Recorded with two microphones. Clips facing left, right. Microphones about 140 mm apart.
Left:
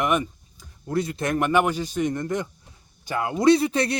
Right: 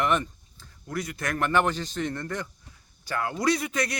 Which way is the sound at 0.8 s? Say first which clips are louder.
Left 7 dB; 25° left (ahead or behind).